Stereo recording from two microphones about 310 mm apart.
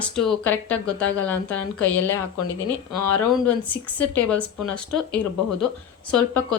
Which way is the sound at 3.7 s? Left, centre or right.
Centre.